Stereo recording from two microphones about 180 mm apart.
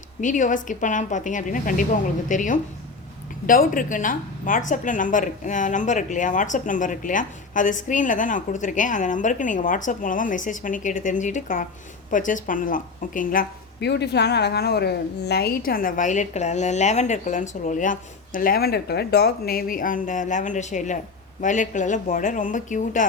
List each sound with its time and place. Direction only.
0.2 s speech: 45° left (ahead or behind)